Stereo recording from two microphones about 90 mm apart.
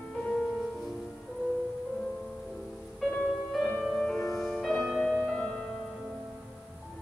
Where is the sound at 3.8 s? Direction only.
5° left (ahead or behind).